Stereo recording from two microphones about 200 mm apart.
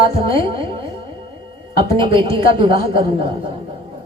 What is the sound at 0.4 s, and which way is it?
Speech, 25° right (ahead or behind).